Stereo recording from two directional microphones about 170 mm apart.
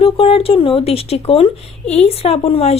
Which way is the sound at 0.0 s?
35° left (ahead or behind).